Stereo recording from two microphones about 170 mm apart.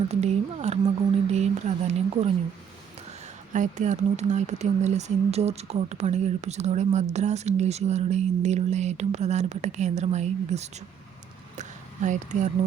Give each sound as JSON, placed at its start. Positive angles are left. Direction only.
{"t": 0.1, "sound": "speech", "side_deg": -40}
{"t": 3.5, "sound": "speech", "side_deg": -45}
{"t": 12.0, "sound": "speech", "side_deg": -45}